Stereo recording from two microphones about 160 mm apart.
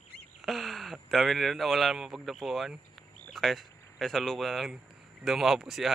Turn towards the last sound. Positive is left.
turn(degrees=0)  # may be behind; listen again after turning